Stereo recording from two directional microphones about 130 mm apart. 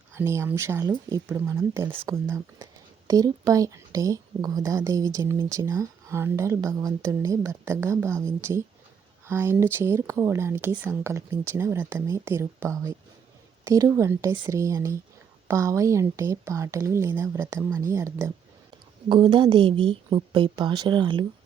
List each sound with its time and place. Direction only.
0.1 s speech: 20° right (ahead or behind)
18.7 s a woman's voice: 40° right (ahead or behind)